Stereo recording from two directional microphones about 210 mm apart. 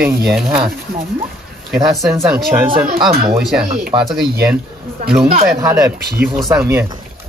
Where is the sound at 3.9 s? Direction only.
25° right (ahead or behind).